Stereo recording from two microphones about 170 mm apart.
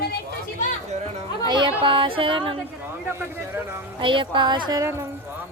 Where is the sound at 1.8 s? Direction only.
30° right (ahead or behind).